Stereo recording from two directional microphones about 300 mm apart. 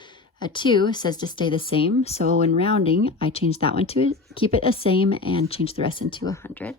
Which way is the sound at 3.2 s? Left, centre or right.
Centre.